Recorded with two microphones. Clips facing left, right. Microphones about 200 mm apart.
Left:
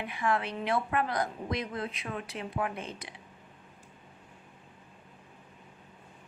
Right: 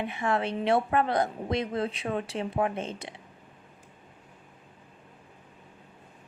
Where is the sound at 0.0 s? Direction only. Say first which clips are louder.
Right 3 dB; 25° right (ahead or behind).